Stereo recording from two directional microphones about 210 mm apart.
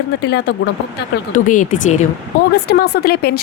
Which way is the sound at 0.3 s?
55° left (ahead or behind).